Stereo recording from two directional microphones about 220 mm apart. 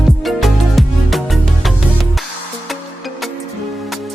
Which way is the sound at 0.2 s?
Centre (ahead or behind).